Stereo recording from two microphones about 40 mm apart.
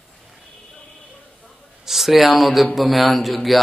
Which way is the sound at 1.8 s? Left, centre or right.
Centre.